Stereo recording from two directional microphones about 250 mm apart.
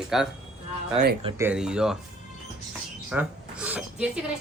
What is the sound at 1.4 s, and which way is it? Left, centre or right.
Speech, centre.